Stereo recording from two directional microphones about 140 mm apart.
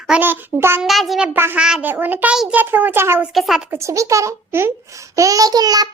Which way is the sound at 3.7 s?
20° right (ahead or behind).